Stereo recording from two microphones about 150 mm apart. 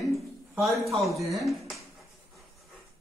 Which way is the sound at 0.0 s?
Centre (ahead or behind).